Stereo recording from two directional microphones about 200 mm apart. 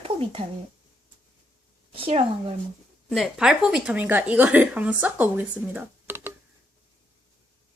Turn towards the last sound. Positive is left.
turn(degrees=-10)  # may be behind; listen again after turning